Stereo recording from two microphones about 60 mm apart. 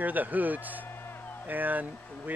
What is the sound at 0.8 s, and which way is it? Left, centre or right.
Music, left.